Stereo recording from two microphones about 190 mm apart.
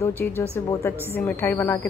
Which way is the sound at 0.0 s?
15° left (ahead or behind).